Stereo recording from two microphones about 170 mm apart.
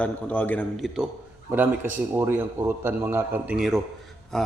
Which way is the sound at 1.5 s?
15° right (ahead or behind).